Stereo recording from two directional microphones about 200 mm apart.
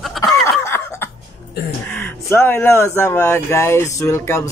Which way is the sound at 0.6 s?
10° left (ahead or behind).